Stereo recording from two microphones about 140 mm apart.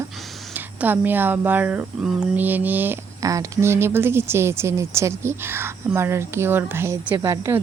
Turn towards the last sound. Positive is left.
turn(degrees=-20)  # may be behind; listen again after turning